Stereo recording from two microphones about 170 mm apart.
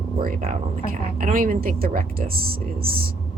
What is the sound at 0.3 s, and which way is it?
Speech, 45° right (ahead or behind).